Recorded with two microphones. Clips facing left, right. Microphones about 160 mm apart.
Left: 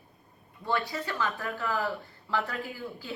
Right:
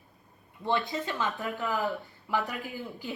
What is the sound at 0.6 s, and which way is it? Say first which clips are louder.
A woman's voice: right 2 dB; 20° right (ahead or behind).